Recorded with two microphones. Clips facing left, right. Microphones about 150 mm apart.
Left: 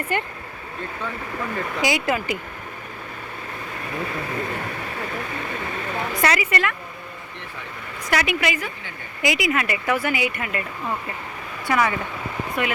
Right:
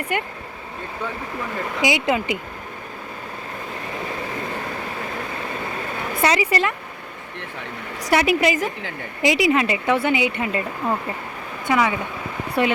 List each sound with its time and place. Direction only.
0.1 s speech: 15° right (ahead or behind)
1.8 s speech: 20° right (ahead or behind)
6.2 s speech: 30° right (ahead or behind)
8.1 s a woman's voice: 30° right (ahead or behind)
11.6 s speech: 15° right (ahead or behind)
12.6 s a woman's voice: 30° right (ahead or behind)